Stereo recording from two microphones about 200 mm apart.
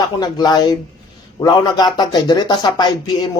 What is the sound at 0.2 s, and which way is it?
Speech, 20° left (ahead or behind).